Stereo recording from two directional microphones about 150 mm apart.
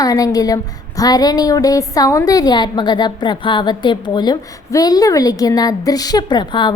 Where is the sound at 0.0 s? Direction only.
25° left (ahead or behind).